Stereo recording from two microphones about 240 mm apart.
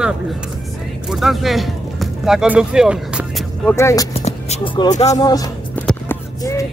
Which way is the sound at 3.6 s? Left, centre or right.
Centre.